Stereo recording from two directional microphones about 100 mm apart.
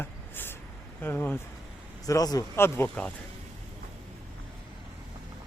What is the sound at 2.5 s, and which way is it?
Speech, 25° left (ahead or behind).